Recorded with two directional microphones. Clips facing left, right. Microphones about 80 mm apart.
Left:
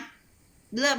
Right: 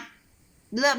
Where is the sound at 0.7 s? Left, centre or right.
Right.